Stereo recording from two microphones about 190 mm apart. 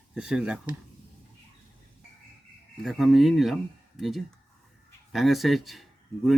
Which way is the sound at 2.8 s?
Centre (ahead or behind).